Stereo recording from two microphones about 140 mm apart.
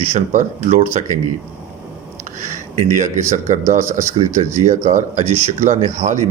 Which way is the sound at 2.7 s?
55° right (ahead or behind).